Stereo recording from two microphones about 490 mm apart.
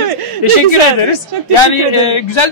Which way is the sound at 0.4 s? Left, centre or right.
Left.